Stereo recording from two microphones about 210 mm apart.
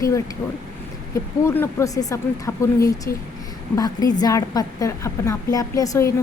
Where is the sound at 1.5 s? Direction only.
10° left (ahead or behind).